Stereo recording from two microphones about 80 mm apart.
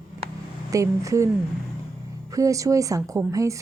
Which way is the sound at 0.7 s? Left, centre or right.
Right.